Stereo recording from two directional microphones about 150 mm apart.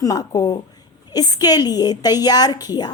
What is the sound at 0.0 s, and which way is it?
A woman's voice, 25° left (ahead or behind).